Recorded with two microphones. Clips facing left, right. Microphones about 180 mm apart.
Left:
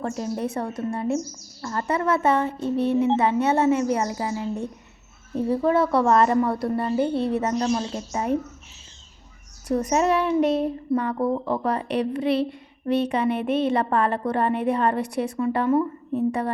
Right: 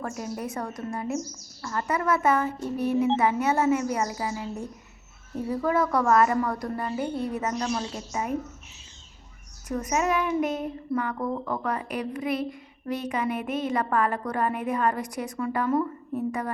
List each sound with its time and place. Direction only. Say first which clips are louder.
0.0 s speech: left 5 dB; 30° left (ahead or behind)
9.6 s speech: left 5 dB; 35° left (ahead or behind)